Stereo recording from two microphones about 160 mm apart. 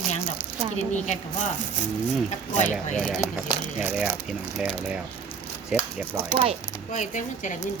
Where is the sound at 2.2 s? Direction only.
45° left (ahead or behind).